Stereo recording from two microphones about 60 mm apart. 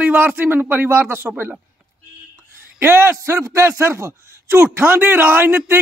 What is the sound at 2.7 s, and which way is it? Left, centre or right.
A man's voice, right.